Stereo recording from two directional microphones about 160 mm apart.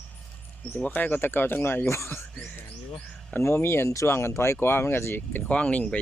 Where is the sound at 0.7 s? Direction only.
10° left (ahead or behind).